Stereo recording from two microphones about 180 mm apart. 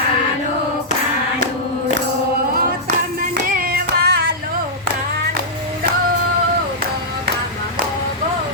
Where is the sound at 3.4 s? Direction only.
55° right (ahead or behind).